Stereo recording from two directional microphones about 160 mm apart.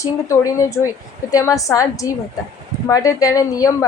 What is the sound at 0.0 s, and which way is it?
A woman's voice, 20° left (ahead or behind).